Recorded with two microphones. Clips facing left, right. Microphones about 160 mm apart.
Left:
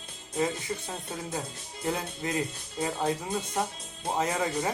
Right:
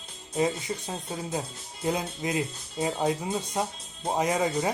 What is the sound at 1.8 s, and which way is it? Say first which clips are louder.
Speech: right 3 dB; 15° right (ahead or behind).